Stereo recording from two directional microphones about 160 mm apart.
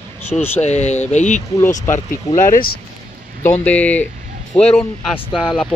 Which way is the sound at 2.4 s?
55° left (ahead or behind).